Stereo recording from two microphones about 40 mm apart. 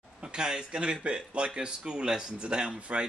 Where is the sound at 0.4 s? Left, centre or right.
Centre.